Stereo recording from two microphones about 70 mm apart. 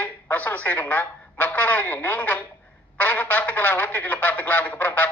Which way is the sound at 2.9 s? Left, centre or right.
Left.